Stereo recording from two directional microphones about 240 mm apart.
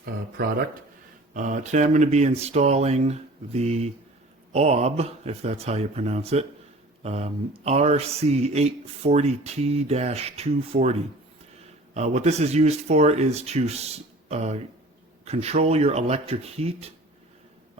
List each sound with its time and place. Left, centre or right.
1.3 s speech: right
11.9 s speech: right